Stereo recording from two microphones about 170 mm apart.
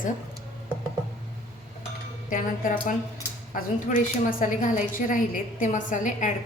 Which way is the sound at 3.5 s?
50° left (ahead or behind).